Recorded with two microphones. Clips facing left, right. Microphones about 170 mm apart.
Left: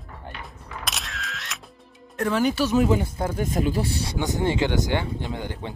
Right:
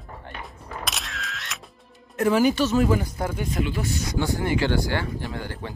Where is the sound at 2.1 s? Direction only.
5° right (ahead or behind).